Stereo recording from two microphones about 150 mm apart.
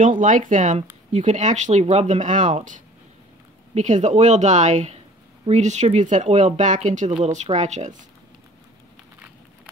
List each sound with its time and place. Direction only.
0.2 s speech: 60° right (ahead or behind)